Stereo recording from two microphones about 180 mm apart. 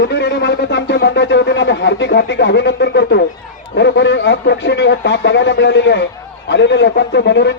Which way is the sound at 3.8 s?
85° left.